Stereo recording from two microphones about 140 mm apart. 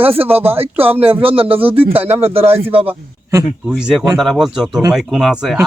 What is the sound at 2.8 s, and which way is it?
Speech, 20° right (ahead or behind).